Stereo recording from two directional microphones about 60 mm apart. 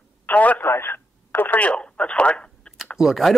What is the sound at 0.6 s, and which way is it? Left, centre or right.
Radio, left.